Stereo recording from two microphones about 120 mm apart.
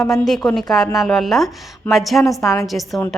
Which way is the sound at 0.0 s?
Centre (ahead or behind).